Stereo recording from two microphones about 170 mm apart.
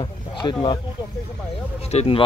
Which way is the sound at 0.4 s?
25° left (ahead or behind).